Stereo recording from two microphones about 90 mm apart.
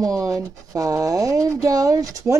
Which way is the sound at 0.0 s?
40° right (ahead or behind).